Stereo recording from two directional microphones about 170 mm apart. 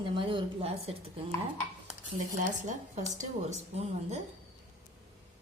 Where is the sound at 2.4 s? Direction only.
45° right (ahead or behind).